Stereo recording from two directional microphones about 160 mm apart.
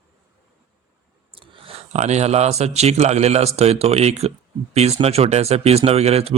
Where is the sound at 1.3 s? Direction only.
35° right (ahead or behind).